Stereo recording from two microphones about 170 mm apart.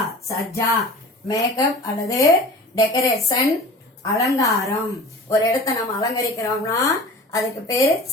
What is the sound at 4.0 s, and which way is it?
A woman's voice, 20° left (ahead or behind).